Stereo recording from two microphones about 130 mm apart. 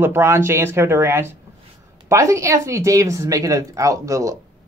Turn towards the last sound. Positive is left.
turn(degrees=-25)  # may be behind; listen again after turning